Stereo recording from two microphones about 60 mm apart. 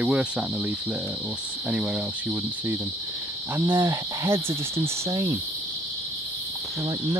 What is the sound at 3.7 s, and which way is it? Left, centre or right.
Cricket, right.